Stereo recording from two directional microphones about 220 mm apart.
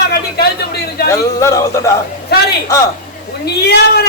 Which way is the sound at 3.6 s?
45° left (ahead or behind).